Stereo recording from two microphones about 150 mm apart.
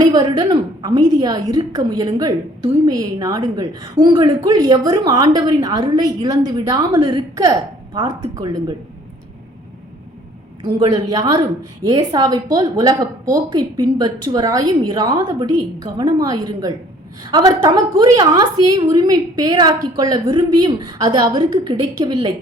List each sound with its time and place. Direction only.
0.0 s a woman's voice: 25° right (ahead or behind)
10.6 s a woman's voice: 30° right (ahead or behind)